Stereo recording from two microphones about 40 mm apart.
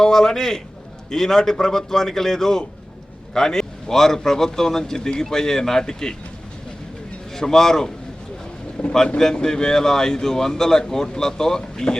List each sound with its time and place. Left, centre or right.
0.0 s a man's voice: centre
7.3 s a man's voice: centre